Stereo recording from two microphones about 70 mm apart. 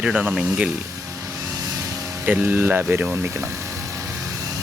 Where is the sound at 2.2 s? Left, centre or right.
Right.